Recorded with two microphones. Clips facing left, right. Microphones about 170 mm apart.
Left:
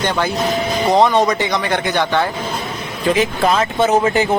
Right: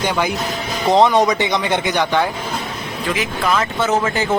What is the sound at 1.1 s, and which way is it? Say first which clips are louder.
Speech: even; centre (ahead or behind).